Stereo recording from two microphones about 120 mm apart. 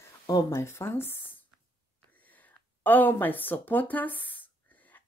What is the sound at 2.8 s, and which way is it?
Speech, 15° left (ahead or behind).